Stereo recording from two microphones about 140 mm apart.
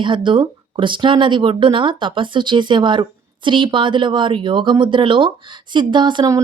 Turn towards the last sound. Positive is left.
turn(degrees=-30)  # may be behind; listen again after turning